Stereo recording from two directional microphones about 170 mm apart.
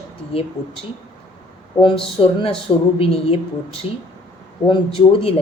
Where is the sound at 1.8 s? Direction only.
30° left (ahead or behind).